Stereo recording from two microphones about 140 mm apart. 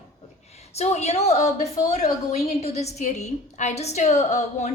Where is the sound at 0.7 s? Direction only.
50° left (ahead or behind).